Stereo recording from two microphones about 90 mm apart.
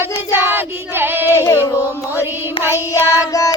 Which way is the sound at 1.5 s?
35° left (ahead or behind).